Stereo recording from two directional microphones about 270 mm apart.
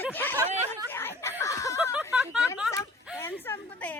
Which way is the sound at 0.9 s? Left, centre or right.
Centre.